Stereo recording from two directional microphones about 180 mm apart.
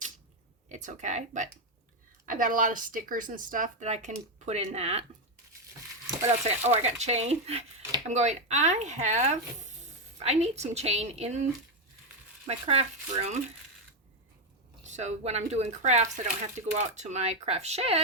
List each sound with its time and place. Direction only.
0.7 s speech: 45° right (ahead or behind)
6.2 s speech: 40° right (ahead or behind)
12.5 s speech: 35° right (ahead or behind)
14.8 s speech: 40° right (ahead or behind)